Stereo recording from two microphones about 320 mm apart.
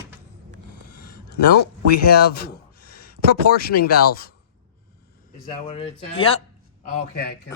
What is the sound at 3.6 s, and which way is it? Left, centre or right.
Speech, left.